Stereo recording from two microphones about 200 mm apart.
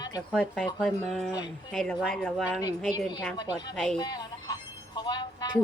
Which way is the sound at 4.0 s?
20° left (ahead or behind).